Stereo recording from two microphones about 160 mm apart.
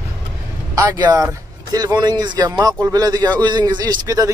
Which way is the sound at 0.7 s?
25° right (ahead or behind).